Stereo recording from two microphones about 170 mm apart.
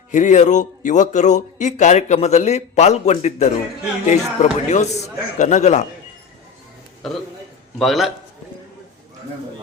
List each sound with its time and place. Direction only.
0.1 s speech: 45° left (ahead or behind)
7.0 s a man's voice: centre (ahead or behind)